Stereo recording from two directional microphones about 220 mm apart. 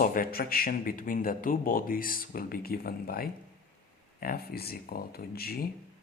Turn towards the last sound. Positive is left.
turn(degrees=45)  # may be behind; listen again after turning